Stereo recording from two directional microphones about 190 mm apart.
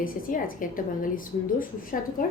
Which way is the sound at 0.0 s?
45° left (ahead or behind).